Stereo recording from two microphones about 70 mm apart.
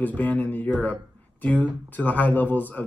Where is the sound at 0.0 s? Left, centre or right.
Left.